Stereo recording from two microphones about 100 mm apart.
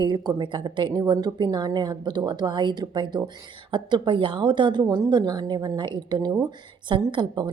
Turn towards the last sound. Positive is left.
turn(degrees=-50)  # may be behind; listen again after turning